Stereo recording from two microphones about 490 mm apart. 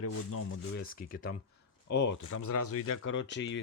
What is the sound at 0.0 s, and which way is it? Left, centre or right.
Speech, left.